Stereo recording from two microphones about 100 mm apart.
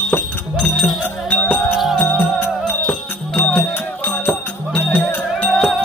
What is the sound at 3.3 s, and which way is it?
Music, 20° left (ahead or behind).